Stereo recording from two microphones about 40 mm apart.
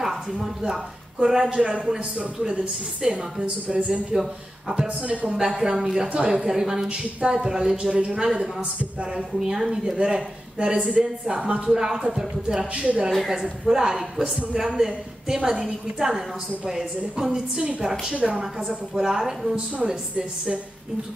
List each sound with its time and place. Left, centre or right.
0.0 s a woman's voice: centre
1.2 s a woman's voice: right
3.6 s speech: right
4.2 s a woman's voice: centre
4.8 s speech: right
5.4 s a woman's voice: centre
6.9 s a woman's voice: right
7.7 s speech: right
8.1 s a woman's voice: centre
9.9 s a woman's voice: right
12.7 s speech: right
13.1 s a woman's voice: centre
13.7 s a woman's voice: centre